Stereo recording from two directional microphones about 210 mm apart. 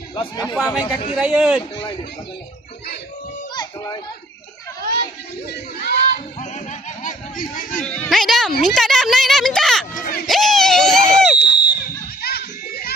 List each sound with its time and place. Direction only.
0.2 s speech: 20° left (ahead or behind)
0.5 s a woman's voice: centre (ahead or behind)
3.5 s children playing: 20° left (ahead or behind)
5.5 s speech: 50° left (ahead or behind)
6.4 s music: 35° left (ahead or behind)
7.8 s a woman's voice: 5° left (ahead or behind)
8.6 s a sound: centre (ahead or behind)
9.9 s run: 40° left (ahead or behind)
10.2 s a sound: centre (ahead or behind)
11.3 s fireworks: 55° left (ahead or behind)
12.2 s a sound: 50° left (ahead or behind)